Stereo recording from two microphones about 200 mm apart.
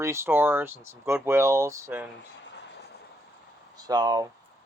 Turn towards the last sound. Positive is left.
turn(degrees=-20)  # may be behind; listen again after turning